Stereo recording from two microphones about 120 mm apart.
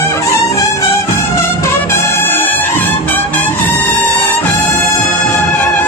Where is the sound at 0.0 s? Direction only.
20° left (ahead or behind).